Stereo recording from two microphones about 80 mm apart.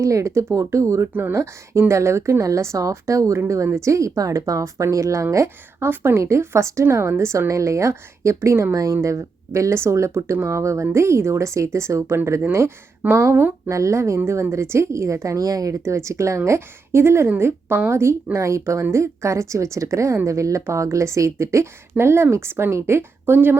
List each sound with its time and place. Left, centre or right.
0.0 s speech: right
1.1 s speech: right
1.9 s speech: right
13.7 s speech: right